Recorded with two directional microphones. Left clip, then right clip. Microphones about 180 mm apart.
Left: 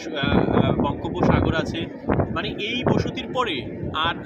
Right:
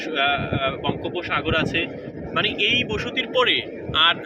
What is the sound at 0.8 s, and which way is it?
Vehicle, 75° left (ahead or behind).